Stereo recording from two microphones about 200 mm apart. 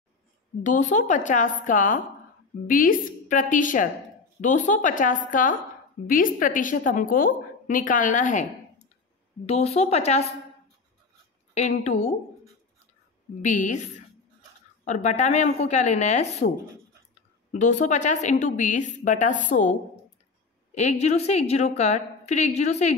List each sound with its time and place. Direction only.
0.7 s a woman's voice: 40° left (ahead or behind)
11.5 s a woman's voice: 35° left (ahead or behind)
13.4 s a woman's voice: 40° left (ahead or behind)
17.5 s a woman's voice: 35° left (ahead or behind)
20.7 s a woman's voice: 35° left (ahead or behind)